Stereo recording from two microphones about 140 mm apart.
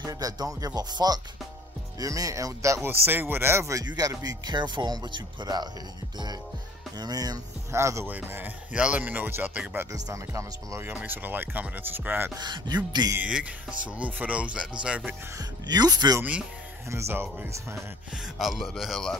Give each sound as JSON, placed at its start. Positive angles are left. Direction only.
{"t": 0.0, "sound": "speech", "side_deg": -25}
{"t": 7.0, "sound": "speech", "side_deg": -30}
{"t": 9.9, "sound": "speech", "side_deg": -25}
{"t": 12.4, "sound": "speech", "side_deg": -30}
{"t": 13.1, "sound": "speech", "side_deg": -10}
{"t": 15.3, "sound": "speech", "side_deg": -30}
{"t": 16.2, "sound": "speech", "side_deg": -10}
{"t": 18.1, "sound": "speech", "side_deg": 0}